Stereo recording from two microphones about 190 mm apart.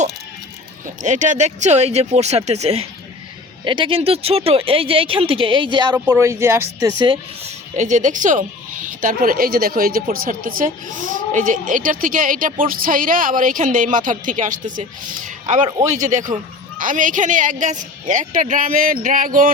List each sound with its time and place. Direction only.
1.0 s a man's voice: 40° right (ahead or behind); by 7.5 s 25° right (ahead or behind)
7.8 s a man's voice: 40° right (ahead or behind)